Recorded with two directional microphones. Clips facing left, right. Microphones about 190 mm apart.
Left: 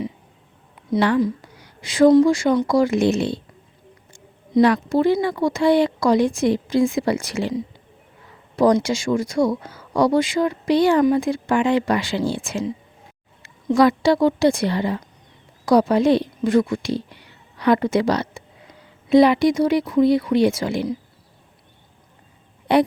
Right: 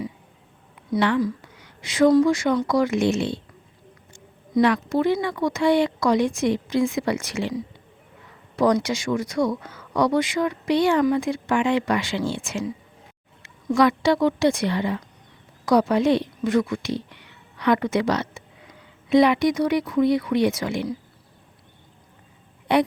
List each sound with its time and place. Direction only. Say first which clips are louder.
0.9 s speech: left 3 dB; 35° left (ahead or behind)
4.6 s speech: left 3 dB; 35° left (ahead or behind)
8.5 s speech: left 3 dB; 30° left (ahead or behind)
13.7 s a woman's voice: left 3 dB; 35° left (ahead or behind)
22.7 s speech: left 3 dB; 35° left (ahead or behind)